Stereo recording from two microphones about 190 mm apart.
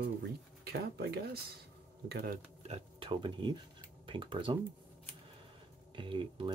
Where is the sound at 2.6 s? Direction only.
30° right (ahead or behind).